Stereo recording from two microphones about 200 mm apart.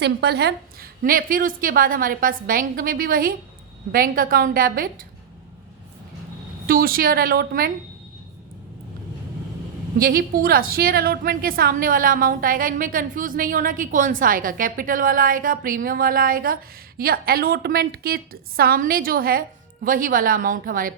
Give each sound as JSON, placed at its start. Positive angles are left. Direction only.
{"t": 0.0, "sound": "a woman's voice", "side_deg": -55}
{"t": 6.7, "sound": "a woman's voice", "side_deg": -45}
{"t": 10.0, "sound": "a woman's voice", "side_deg": -45}